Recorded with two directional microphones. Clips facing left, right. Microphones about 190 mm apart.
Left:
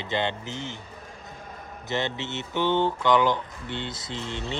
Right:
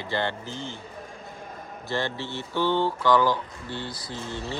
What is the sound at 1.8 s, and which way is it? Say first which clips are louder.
A man's voice: even; 20° left (ahead or behind).